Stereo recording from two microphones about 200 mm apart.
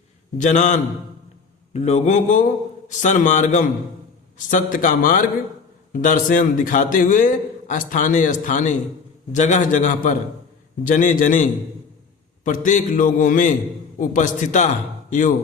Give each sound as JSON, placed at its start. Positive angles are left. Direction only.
{"t": 0.3, "sound": "a man's voice", "side_deg": 40}
{"t": 12.5, "sound": "a man's voice", "side_deg": 40}